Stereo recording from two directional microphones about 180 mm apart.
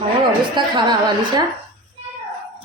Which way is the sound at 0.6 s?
25° right (ahead or behind).